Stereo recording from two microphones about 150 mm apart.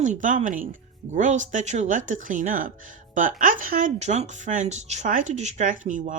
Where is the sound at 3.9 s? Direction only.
50° right (ahead or behind).